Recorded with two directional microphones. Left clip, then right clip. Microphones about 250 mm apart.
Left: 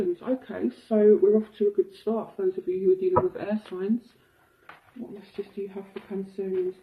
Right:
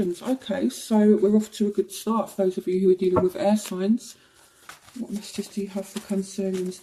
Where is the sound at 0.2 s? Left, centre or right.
Right.